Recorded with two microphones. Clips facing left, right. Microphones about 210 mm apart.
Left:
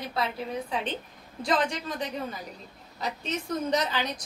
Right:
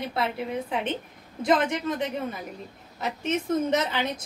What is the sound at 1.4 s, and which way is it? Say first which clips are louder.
A woman's voice: right 4 dB; 20° right (ahead or behind).